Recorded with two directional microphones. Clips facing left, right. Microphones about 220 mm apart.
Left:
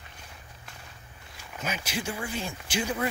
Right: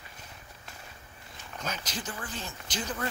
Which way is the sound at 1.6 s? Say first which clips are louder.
Left 4 dB; 10° left (ahead or behind).